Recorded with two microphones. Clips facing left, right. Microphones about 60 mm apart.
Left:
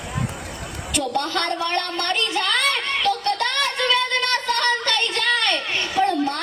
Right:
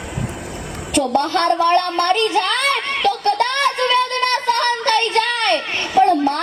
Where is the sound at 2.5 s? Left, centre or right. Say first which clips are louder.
Right 3 dB; right.